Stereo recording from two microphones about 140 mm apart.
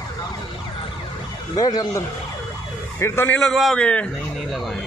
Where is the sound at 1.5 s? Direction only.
25° left (ahead or behind).